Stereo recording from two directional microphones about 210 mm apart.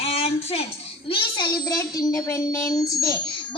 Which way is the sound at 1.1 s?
25° left (ahead or behind).